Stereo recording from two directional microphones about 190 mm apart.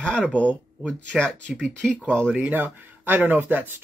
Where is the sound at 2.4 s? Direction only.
10° right (ahead or behind).